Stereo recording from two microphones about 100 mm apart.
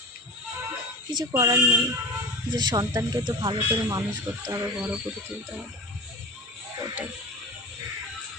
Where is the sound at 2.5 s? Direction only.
45° right (ahead or behind).